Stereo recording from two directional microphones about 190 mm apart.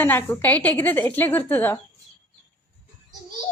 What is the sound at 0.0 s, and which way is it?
A woman's voice, 10° left (ahead or behind).